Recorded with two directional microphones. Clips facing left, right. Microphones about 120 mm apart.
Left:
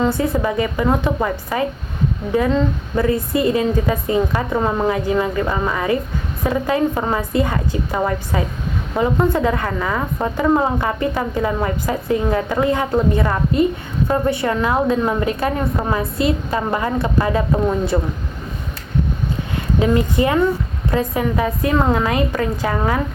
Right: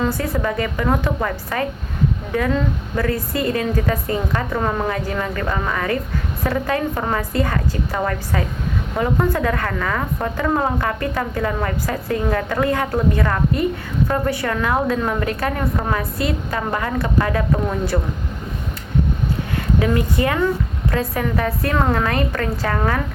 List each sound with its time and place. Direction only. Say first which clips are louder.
0.0 s a woman's voice: left 3 dB; 20° left (ahead or behind)
19.8 s a woman's voice: left 4 dB; 20° left (ahead or behind)